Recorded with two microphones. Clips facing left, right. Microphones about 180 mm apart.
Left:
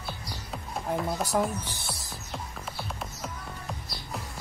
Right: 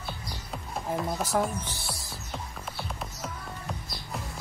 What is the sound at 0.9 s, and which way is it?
Speech, centre (ahead or behind).